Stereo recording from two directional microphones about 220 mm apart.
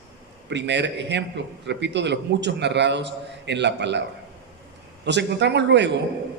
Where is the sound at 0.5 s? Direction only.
55° right (ahead or behind).